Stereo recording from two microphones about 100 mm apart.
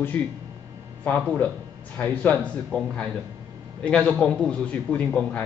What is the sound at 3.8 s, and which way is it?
A man's voice, 10° left (ahead or behind).